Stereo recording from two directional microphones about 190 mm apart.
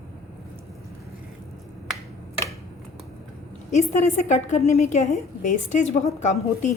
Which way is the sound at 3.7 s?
40° left (ahead or behind).